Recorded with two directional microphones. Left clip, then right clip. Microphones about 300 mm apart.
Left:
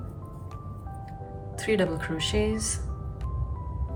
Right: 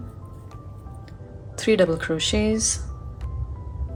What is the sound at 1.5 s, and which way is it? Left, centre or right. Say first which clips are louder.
Speech: right 7 dB; centre.